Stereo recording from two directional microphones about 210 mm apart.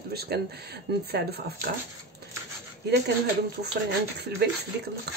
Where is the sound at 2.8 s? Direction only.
50° right (ahead or behind).